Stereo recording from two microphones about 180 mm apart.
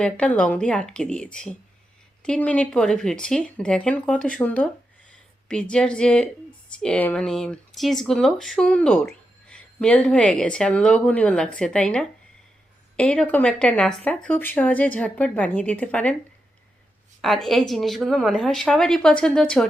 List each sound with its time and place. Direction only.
0.0 s speech: 5° left (ahead or behind)
17.2 s speech: centre (ahead or behind)